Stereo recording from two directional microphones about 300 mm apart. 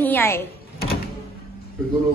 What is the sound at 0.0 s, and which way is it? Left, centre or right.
Speech, centre.